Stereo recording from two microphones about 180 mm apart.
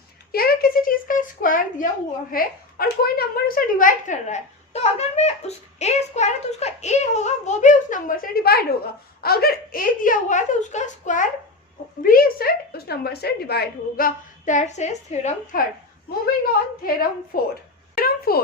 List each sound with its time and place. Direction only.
0.3 s speech: 55° left (ahead or behind); by 15.6 s 40° left (ahead or behind)
16.8 s speech: 55° left (ahead or behind)
17.9 s a sound: 55° left (ahead or behind)